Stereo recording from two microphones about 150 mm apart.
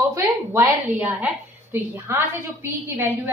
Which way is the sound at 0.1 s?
15° right (ahead or behind).